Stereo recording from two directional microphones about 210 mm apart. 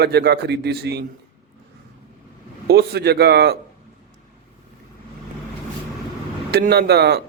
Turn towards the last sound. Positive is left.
turn(degrees=-50)  # may be behind; listen again after turning